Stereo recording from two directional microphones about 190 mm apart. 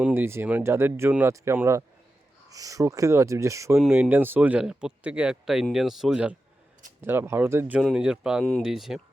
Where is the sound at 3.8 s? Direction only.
5° right (ahead or behind).